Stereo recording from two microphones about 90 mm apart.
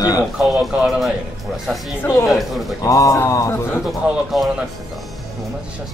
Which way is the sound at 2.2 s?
Centre (ahead or behind).